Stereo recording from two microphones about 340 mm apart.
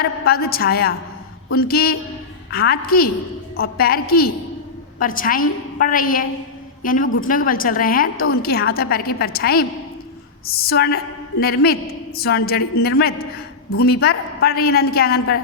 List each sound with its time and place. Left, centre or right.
0.0 s a woman's voice: left